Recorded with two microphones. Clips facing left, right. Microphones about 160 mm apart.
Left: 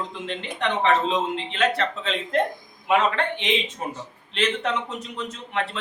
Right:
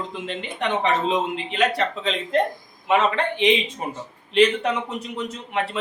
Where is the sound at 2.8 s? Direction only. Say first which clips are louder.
Right 1 dB; centre (ahead or behind).